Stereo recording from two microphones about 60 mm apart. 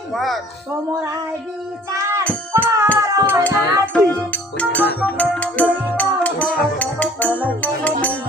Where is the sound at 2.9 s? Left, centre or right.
Left.